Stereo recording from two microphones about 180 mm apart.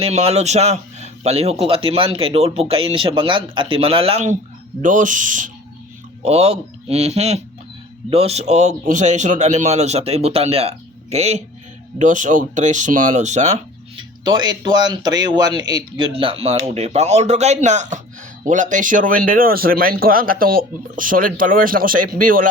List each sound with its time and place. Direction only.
0.0 s speech: 35° right (ahead or behind)
6.2 s speech: 35° right (ahead or behind)
13.9 s speech: 25° right (ahead or behind); by 22.4 s 50° right (ahead or behind)